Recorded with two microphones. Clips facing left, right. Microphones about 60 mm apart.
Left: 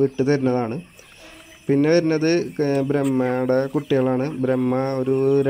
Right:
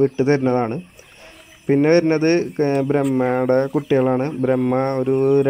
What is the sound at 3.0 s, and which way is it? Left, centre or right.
Speech, centre.